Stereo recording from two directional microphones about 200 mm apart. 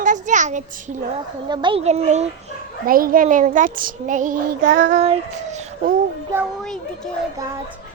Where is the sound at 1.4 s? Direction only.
20° right (ahead or behind); by 4.5 s 40° right (ahead or behind).